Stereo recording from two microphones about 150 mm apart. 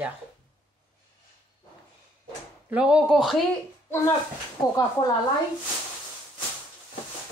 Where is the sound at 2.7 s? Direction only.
5° right (ahead or behind).